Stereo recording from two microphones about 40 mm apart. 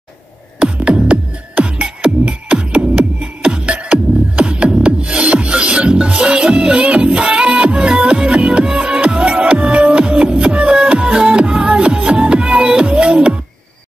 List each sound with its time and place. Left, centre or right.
1.5 s music: right